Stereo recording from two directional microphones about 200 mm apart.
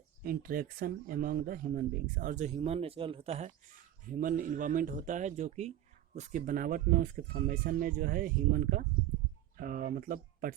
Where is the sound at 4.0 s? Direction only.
40° right (ahead or behind).